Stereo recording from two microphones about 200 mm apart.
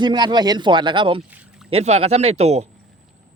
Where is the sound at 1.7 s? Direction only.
30° right (ahead or behind).